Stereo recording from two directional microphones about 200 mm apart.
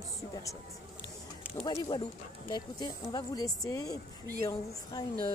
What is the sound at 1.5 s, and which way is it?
Speech, 20° left (ahead or behind).